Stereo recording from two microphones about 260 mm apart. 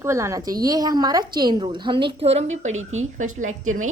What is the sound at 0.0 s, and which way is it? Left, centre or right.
A woman's voice, centre.